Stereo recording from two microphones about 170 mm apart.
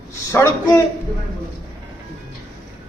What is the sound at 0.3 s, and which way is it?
Speech, 15° left (ahead or behind).